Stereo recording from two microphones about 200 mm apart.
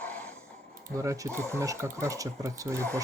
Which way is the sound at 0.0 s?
5° left (ahead or behind).